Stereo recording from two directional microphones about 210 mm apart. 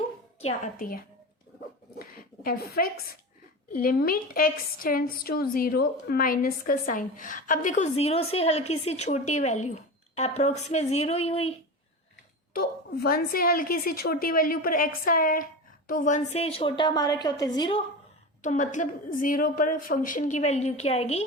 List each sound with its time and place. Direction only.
0.3 s a woman's voice: 30° left (ahead or behind)
0.8 s a woman's voice: 45° left (ahead or behind)
2.0 s a sound: 45° left (ahead or behind)
2.7 s a woman's voice: 45° left (ahead or behind); by 11.5 s 30° left (ahead or behind)
12.5 s a woman's voice: 45° left (ahead or behind); by 17.8 s 25° left (ahead or behind)
18.4 s a woman's voice: 35° left (ahead or behind)